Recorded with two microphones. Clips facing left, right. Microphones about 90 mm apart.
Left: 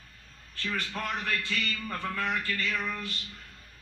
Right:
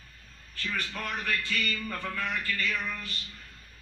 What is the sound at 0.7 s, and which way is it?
A man's voice, 25° left (ahead or behind).